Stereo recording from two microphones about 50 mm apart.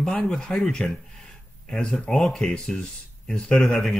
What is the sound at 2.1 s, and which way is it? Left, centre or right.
Speech, centre.